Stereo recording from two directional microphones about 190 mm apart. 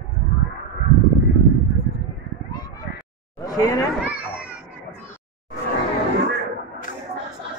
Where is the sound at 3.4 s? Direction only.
20° left (ahead or behind).